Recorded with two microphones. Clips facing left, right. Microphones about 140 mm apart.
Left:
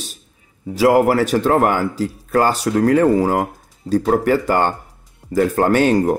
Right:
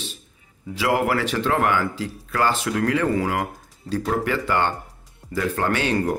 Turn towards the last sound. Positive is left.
turn(degrees=45)  # may be behind; listen again after turning